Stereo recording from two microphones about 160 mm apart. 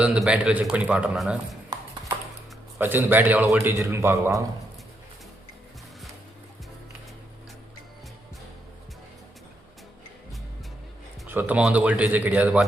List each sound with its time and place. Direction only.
0.0 s a man's voice: 5° right (ahead or behind)
2.7 s speech: 15° right (ahead or behind)
11.3 s speech: 10° right (ahead or behind)